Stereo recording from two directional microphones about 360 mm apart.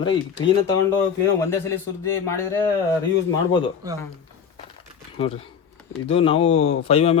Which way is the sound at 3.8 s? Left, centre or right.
Centre.